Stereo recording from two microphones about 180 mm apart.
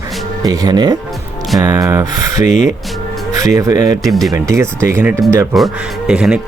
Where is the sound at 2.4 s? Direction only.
40° left (ahead or behind).